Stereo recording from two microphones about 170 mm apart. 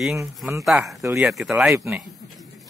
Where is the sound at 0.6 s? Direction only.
Centre (ahead or behind).